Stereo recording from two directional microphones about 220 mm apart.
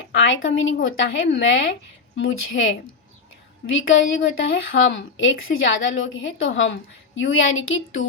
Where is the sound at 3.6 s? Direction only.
60° left (ahead or behind).